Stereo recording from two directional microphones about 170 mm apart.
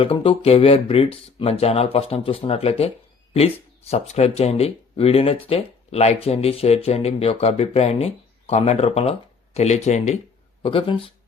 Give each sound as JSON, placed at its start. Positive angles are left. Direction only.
{"t": 0.0, "sound": "speech", "side_deg": 35}
{"t": 10.6, "sound": "speech", "side_deg": 30}